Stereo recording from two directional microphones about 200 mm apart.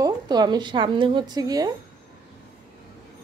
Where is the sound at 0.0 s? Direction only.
20° right (ahead or behind).